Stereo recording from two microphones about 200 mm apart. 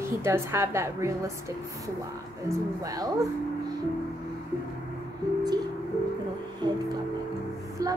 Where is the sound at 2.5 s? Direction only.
20° right (ahead or behind).